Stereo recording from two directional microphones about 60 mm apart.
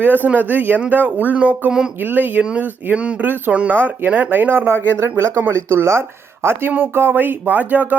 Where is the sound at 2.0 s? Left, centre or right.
Right.